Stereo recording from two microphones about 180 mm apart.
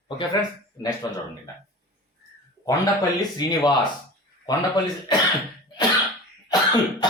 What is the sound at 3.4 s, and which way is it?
Speech, 25° left (ahead or behind).